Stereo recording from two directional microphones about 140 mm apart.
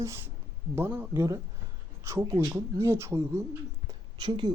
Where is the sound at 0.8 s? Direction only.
15° right (ahead or behind).